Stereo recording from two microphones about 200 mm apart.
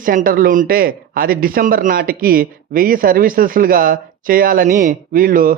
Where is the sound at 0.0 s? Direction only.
45° right (ahead or behind).